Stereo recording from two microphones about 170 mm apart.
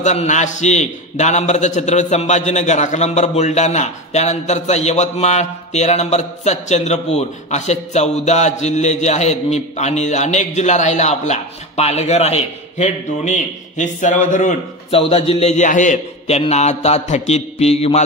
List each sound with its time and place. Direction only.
0.0 s a man's voice: 45° left (ahead or behind)
14.9 s a man's voice: 35° left (ahead or behind)